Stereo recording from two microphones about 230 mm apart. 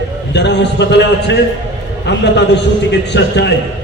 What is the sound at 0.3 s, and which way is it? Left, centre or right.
Speech, left.